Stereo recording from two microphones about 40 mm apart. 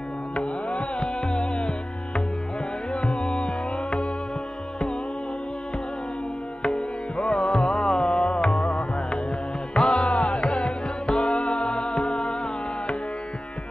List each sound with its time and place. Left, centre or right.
0.4 s music: left
2.9 s music: left
6.6 s music: left